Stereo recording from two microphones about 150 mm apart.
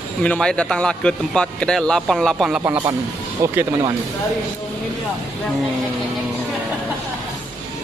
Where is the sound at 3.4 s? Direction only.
20° right (ahead or behind).